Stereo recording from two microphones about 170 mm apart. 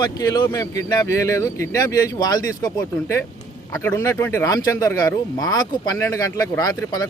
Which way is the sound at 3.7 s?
15° left (ahead or behind).